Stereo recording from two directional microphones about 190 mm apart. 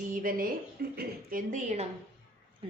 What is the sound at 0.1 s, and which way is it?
A woman's voice, 45° right (ahead or behind).